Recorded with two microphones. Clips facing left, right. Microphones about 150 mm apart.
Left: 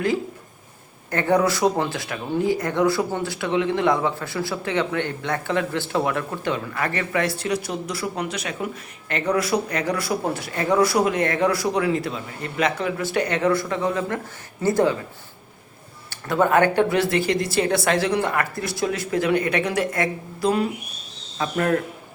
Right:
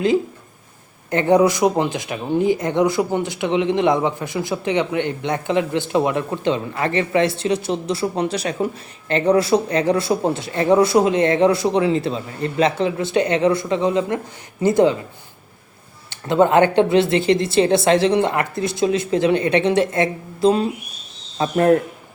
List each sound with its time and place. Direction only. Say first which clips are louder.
1.1 s speech: right 5 dB; 20° right (ahead or behind)
16.0 s speech: right 5 dB; 25° right (ahead or behind)